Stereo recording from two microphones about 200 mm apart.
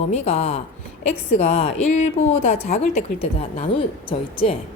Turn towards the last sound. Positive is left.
turn(degrees=25)  # may be behind; listen again after turning